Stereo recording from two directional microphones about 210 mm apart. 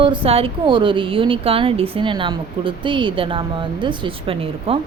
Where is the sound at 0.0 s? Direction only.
25° right (ahead or behind).